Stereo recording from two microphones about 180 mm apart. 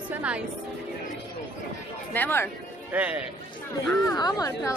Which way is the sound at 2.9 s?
10° right (ahead or behind).